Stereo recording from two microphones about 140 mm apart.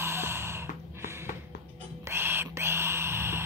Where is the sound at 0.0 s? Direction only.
15° right (ahead or behind).